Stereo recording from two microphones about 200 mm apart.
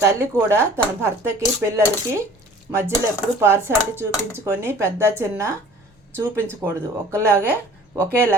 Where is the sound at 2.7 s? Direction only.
10° right (ahead or behind).